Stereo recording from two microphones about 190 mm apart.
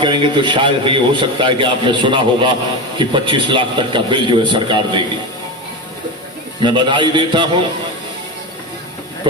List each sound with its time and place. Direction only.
0.0 s a man's voice: 25° right (ahead or behind)
6.6 s a man's voice: 25° right (ahead or behind)